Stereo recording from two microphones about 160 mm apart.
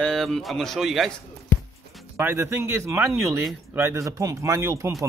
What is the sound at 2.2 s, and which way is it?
Speech, 15° right (ahead or behind).